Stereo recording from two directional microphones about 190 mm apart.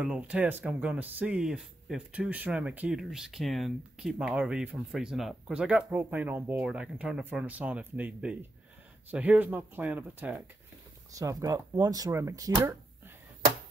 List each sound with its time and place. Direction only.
0.0 s speech: 5° right (ahead or behind)